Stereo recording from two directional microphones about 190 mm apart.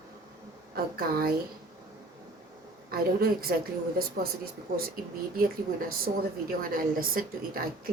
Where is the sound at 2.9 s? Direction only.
55° right (ahead or behind).